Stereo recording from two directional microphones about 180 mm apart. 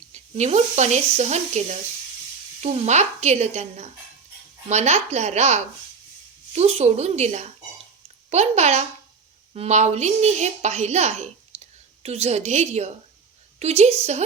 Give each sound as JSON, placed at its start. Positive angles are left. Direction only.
{"t": 0.1, "sound": "a child's voice", "side_deg": -40}